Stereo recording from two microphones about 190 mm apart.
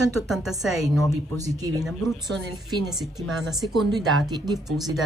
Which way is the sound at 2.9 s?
Centre (ahead or behind).